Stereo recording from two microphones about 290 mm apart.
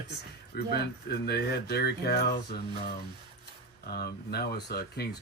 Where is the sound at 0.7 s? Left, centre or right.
Left.